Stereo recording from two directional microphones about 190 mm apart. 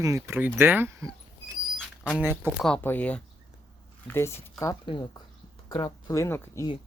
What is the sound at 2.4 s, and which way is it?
Speech, 5° left (ahead or behind).